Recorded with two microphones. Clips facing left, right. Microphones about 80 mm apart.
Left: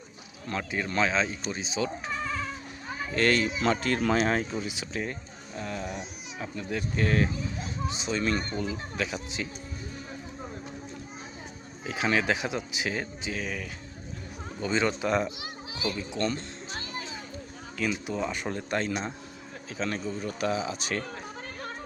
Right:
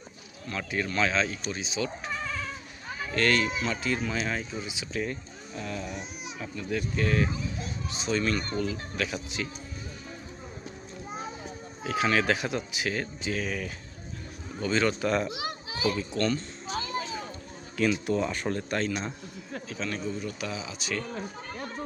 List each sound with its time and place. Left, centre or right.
0.4 s speech: left
3.1 s speech: left
3.6 s speech: left
5.5 s speech: left
7.9 s speech: centre
11.9 s speech: left; by 13.7 s centre
14.6 s speech: left
15.4 s children playing: right
16.1 s speech: centre
17.7 s speech: centre
18.7 s speech: left